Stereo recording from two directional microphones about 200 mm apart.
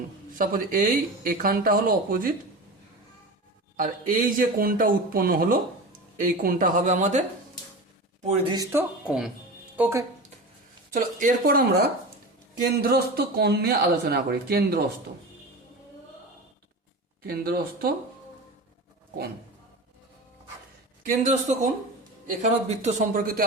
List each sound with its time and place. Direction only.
0.3 s speech: 45° right (ahead or behind)
3.8 s speech: 45° right (ahead or behind)
8.4 s speech: 20° right (ahead or behind)
9.0 s speech: 5° right (ahead or behind)
10.9 s speech: 40° right (ahead or behind)
12.7 s speech: 55° right (ahead or behind)
17.2 s speech: 50° right (ahead or behind)
21.0 s speech: 40° right (ahead or behind)